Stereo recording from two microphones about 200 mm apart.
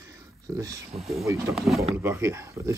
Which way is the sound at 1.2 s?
15° right (ahead or behind).